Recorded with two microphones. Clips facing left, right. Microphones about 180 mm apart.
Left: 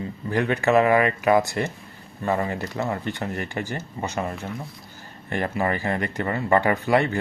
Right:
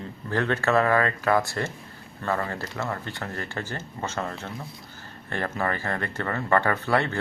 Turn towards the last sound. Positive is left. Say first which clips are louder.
# left 4 dB
turn(degrees=15)  # may be behind; listen again after turning